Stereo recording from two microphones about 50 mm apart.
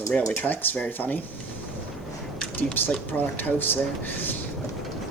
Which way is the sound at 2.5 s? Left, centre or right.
Left.